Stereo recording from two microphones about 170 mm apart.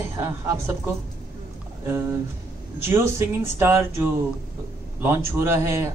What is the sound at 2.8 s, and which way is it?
A man's voice, 15° right (ahead or behind).